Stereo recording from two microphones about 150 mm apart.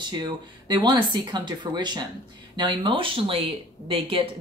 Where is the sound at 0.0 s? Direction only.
30° right (ahead or behind).